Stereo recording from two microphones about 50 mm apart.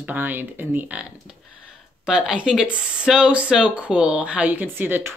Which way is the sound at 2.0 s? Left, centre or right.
Centre.